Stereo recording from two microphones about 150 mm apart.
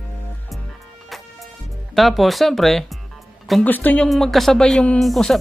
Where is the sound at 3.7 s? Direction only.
10° left (ahead or behind).